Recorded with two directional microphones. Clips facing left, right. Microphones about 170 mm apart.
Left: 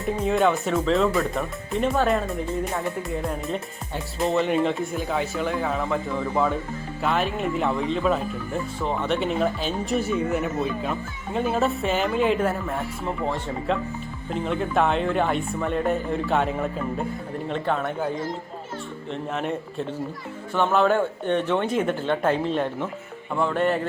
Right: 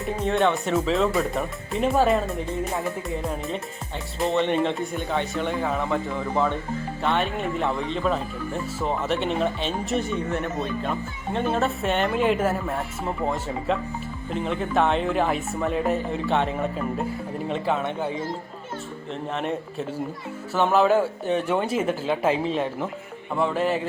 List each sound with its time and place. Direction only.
0.0 s speech: centre (ahead or behind)